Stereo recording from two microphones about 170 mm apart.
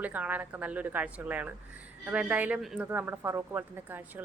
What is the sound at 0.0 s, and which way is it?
A woman's voice, 10° right (ahead or behind).